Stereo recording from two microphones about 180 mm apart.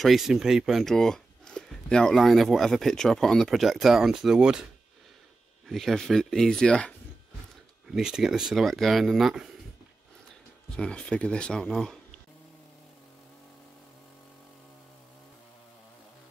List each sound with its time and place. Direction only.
0.0 s speech: centre (ahead or behind)
5.7 s speech: centre (ahead or behind)
10.8 s speech: 5° left (ahead or behind)